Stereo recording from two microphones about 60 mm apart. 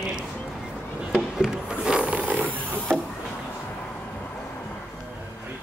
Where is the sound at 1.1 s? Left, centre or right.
Centre.